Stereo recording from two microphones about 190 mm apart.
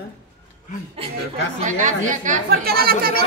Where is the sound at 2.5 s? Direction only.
55° right (ahead or behind).